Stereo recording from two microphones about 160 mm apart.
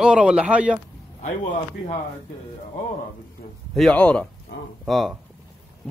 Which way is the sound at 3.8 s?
5° left (ahead or behind).